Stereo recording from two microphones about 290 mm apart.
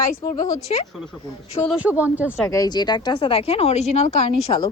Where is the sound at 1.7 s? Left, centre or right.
Centre.